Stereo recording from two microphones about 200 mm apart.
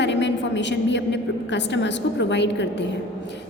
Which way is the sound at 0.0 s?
60° left (ahead or behind).